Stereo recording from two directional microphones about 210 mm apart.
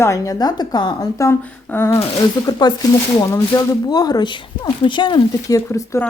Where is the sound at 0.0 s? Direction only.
15° left (ahead or behind).